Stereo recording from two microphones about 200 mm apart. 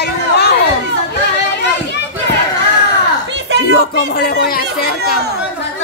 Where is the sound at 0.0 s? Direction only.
55° left (ahead or behind).